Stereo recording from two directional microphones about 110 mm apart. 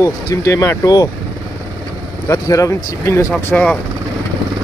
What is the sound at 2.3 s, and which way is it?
Speech, 30° left (ahead or behind).